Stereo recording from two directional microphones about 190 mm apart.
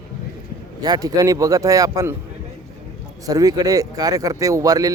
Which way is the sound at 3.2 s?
20° right (ahead or behind).